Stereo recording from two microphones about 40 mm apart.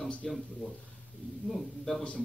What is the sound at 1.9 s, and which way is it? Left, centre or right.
Speech, left.